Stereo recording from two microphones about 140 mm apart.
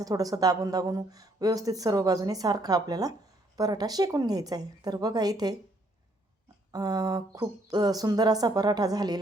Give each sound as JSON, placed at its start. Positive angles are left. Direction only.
{"t": 0.0, "sound": "speech", "side_deg": -25}
{"t": 6.7, "sound": "speech", "side_deg": -25}